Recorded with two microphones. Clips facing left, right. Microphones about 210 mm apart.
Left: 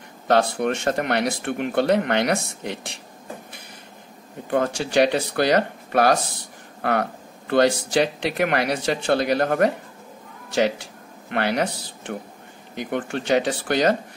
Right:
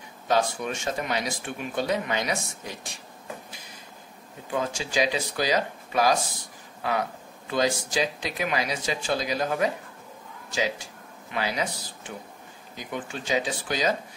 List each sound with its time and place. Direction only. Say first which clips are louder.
0.3 s speech: left 6 dB; 65° left (ahead or behind)
4.5 s speech: left 7 dB; 60° left (ahead or behind)